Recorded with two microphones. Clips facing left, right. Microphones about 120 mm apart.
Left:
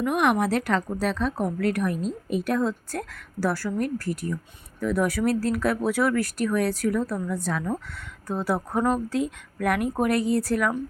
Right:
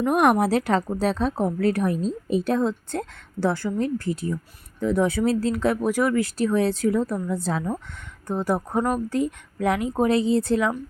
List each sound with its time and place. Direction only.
0.0 s a woman's voice: 40° right (ahead or behind); by 6.2 s 15° right (ahead or behind)
6.3 s a woman's voice: 25° right (ahead or behind)
8.3 s speech: 15° right (ahead or behind)
9.1 s speech: 75° left (ahead or behind)
9.9 s a woman's voice: 20° right (ahead or behind)